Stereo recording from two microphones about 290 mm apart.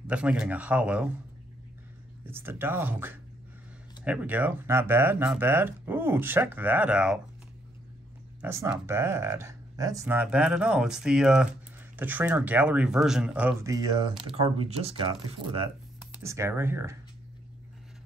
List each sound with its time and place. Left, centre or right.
0.0 s speech: centre
2.2 s speech: centre
8.4 s speech: centre